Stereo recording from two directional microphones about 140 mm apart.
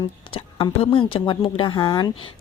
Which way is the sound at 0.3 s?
40° left (ahead or behind).